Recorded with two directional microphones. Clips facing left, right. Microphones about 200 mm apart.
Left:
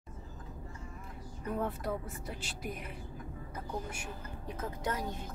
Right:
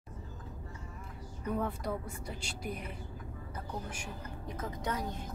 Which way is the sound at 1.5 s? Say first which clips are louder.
Even; centre (ahead or behind).